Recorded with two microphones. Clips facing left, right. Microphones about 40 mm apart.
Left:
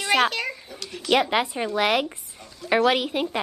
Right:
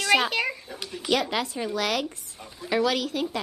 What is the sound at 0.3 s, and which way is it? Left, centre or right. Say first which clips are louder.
Speech: right 2 dB; centre.